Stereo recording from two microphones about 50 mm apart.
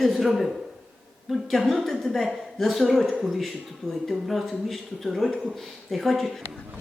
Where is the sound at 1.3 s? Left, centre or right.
Centre.